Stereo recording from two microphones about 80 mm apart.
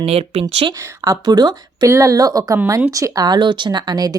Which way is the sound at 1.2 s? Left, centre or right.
Right.